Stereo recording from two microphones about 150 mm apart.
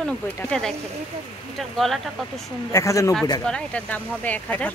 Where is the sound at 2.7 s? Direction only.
20° left (ahead or behind).